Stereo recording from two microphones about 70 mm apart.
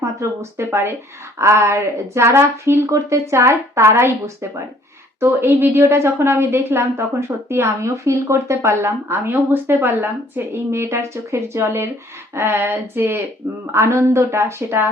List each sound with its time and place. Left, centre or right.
0.0 s a woman's voice: right
10.5 s a woman's voice: right
13.7 s a woman's voice: right